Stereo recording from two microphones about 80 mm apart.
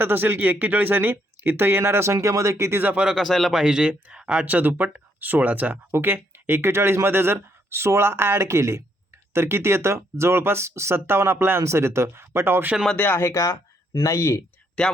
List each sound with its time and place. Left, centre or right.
0.0 s speech: right
2.8 s speech: centre
3.2 s speech: centre; by 12.7 s right
13.0 s speech: left